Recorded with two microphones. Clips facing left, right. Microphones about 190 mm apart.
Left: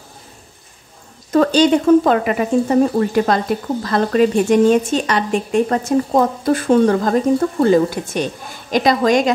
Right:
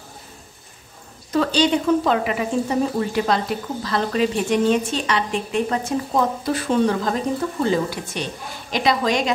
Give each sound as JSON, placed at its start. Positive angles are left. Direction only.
{"t": 1.3, "sound": "a woman's voice", "side_deg": 45}